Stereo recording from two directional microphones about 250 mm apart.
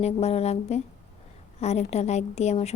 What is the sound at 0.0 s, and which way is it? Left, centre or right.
A woman's voice, left.